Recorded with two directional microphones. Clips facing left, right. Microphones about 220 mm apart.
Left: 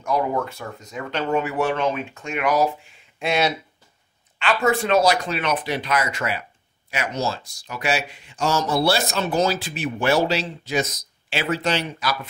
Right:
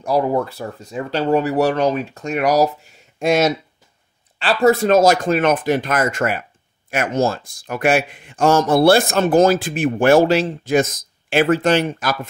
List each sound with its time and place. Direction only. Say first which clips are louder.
0.0 s a man's voice: right 5 dB; 35° right (ahead or behind)